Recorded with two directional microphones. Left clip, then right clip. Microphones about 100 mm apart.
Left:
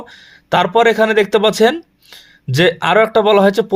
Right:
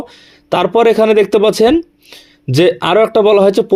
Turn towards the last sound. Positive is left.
turn(degrees=-15)  # may be behind; listen again after turning